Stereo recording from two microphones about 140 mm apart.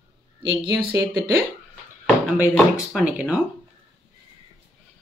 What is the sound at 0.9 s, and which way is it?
Speech, 25° right (ahead or behind).